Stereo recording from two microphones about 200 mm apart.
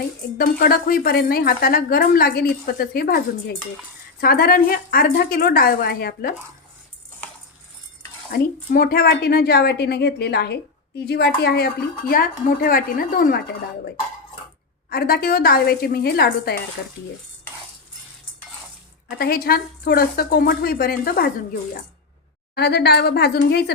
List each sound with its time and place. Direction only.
0.3 s a woman's voice: 45° left (ahead or behind)
8.3 s a woman's voice: 45° left (ahead or behind)
14.8 s a woman's voice: 50° left (ahead or behind)
19.2 s a woman's voice: 50° left (ahead or behind)